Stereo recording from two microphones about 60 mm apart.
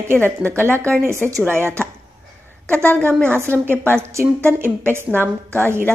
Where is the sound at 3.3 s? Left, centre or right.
Right.